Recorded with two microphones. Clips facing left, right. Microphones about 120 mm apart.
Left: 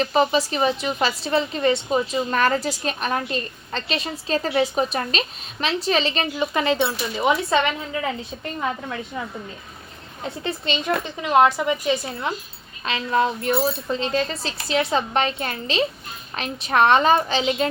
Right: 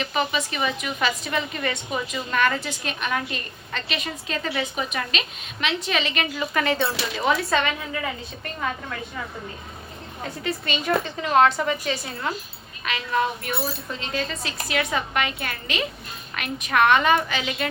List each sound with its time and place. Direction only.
0.0 s a woman's voice: 35° left (ahead or behind)
6.3 s a woman's voice: 20° left (ahead or behind)
10.4 s a woman's voice: 20° left (ahead or behind)
12.8 s a woman's voice: 30° left (ahead or behind)